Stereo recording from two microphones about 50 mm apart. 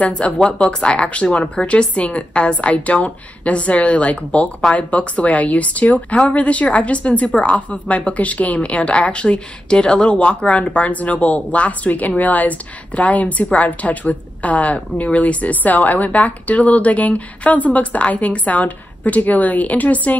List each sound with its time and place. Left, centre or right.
0.0 s speech: left